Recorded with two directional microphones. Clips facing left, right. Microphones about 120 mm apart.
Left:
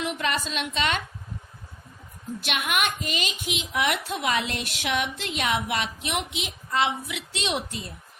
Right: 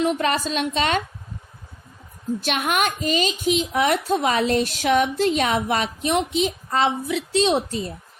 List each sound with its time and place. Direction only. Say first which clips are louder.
0.0 s a woman's voice: right 7 dB; 40° right (ahead or behind)
2.4 s a woman's voice: right 4 dB; 40° right (ahead or behind)